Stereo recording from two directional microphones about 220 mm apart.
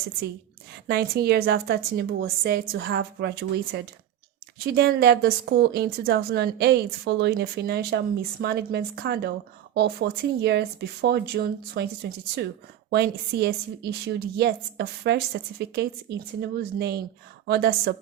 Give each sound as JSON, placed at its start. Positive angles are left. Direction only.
{"t": 0.9, "sound": "speech", "side_deg": -45}